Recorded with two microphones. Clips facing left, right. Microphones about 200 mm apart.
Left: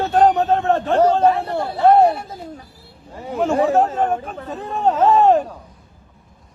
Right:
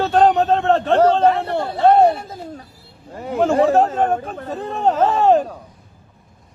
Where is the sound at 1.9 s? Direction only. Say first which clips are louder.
Even; 30° right (ahead or behind).